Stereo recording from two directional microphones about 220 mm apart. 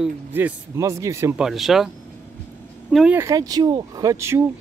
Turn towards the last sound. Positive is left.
turn(degrees=-15)  # may be behind; listen again after turning